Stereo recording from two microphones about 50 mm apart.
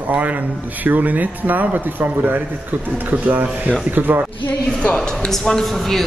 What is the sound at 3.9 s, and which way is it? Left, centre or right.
Speech, right.